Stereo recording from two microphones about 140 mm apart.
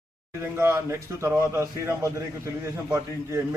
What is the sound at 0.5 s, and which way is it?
A man's voice, 20° right (ahead or behind).